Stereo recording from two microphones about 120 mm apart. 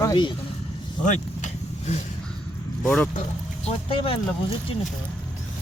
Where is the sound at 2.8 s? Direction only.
5° left (ahead or behind).